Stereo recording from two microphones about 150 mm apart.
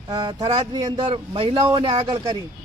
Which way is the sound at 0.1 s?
30° right (ahead or behind).